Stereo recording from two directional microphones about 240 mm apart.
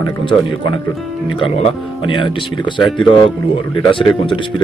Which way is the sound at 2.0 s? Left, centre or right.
Left.